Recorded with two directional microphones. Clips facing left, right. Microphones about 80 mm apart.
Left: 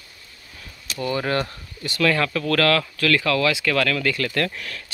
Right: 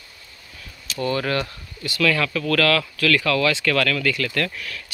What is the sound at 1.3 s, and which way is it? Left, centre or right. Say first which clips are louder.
Speech: left 1 dB; left.